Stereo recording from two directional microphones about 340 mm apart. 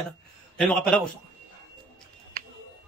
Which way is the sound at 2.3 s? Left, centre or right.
Right.